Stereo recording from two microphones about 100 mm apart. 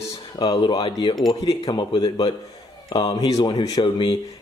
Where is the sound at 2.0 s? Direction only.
45° left (ahead or behind).